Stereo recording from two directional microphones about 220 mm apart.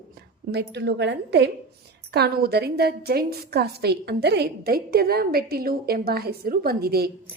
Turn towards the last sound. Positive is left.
turn(degrees=-45)  # may be behind; listen again after turning